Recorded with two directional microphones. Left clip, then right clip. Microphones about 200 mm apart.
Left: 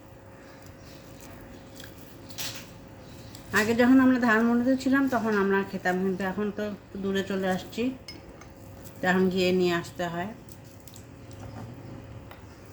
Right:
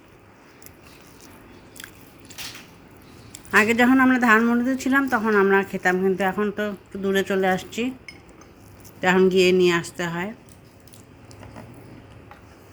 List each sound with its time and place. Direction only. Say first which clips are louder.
3.5 s speech: right 5 dB; 40° right (ahead or behind)
9.0 s speech: right 7 dB; 35° right (ahead or behind)